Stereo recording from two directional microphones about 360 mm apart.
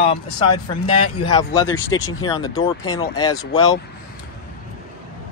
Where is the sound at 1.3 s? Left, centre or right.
Centre.